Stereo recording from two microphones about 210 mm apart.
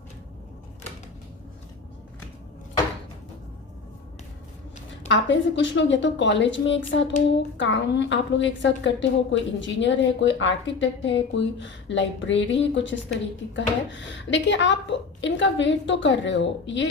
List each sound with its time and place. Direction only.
5.0 s a woman's voice: 60° left (ahead or behind)